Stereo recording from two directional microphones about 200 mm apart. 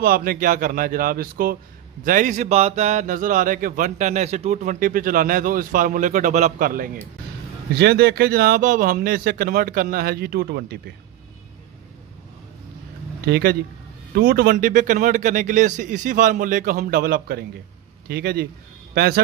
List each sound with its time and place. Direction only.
0.0 s speech: 45° right (ahead or behind)
13.2 s speech: 50° right (ahead or behind)